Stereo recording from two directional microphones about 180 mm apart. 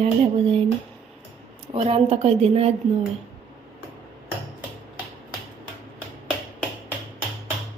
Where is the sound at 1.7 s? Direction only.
35° right (ahead or behind).